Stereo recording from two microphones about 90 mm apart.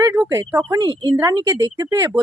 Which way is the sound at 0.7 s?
50° right (ahead or behind).